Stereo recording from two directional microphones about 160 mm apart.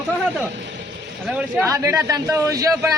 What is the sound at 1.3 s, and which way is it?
Speech, 5° right (ahead or behind).